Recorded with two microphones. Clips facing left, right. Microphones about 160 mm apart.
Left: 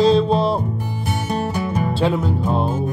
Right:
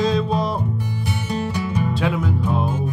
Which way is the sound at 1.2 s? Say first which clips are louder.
Left 2 dB; 50° left (ahead or behind).